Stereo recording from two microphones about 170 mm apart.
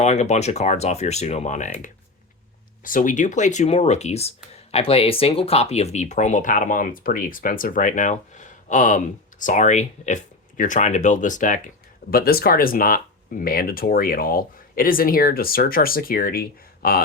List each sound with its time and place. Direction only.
0.0 s speech: 40° left (ahead or behind)
12.1 s speech: 60° left (ahead or behind)